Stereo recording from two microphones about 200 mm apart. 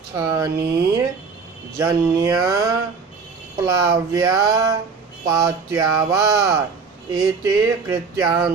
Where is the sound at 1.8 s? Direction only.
15° right (ahead or behind).